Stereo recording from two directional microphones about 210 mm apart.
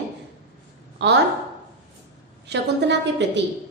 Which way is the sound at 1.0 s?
55° right (ahead or behind).